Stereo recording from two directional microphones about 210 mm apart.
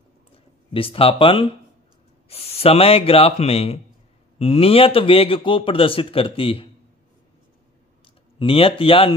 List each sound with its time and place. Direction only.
0.7 s a man's voice: 25° left (ahead or behind)
8.0 s speech: 25° left (ahead or behind)